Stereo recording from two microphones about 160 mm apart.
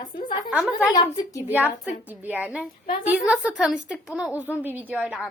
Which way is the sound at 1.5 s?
10° right (ahead or behind).